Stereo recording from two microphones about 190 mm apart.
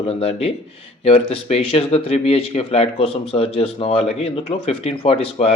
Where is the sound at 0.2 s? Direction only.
30° left (ahead or behind).